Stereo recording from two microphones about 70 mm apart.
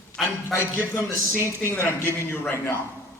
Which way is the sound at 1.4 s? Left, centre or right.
Left.